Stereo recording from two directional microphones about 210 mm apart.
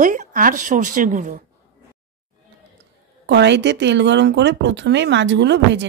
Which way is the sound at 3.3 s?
55° right (ahead or behind).